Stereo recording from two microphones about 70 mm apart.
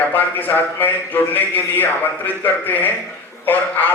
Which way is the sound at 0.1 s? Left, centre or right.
Left.